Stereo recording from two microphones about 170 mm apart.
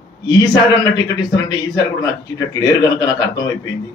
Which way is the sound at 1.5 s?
25° left (ahead or behind).